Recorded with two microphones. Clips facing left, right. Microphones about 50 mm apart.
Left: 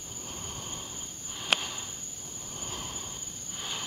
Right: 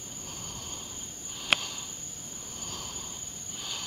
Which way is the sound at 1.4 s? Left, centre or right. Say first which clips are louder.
Right 1 dB; centre.